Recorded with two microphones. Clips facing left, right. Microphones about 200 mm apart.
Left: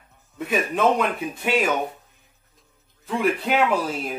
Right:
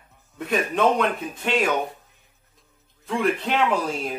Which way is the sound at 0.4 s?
5° left (ahead or behind).